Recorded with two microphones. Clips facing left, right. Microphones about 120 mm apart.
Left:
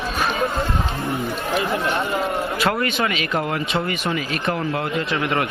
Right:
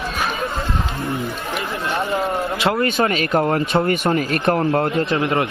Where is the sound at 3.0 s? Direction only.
40° right (ahead or behind).